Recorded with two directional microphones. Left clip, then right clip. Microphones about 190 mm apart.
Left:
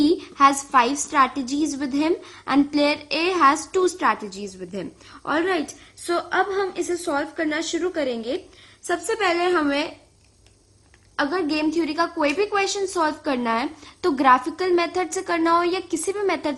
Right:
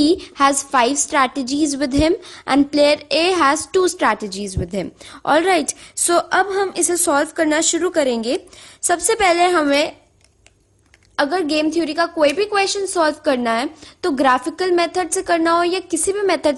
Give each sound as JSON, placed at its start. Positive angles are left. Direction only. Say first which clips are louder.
{"t": 0.0, "sound": "a woman's voice", "louder": "right 2 dB", "side_deg": -30}
{"t": 11.2, "sound": "a woman's voice", "louder": "right 5 dB", "side_deg": -35}